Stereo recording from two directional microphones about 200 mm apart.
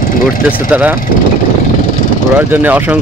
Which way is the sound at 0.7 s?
10° right (ahead or behind).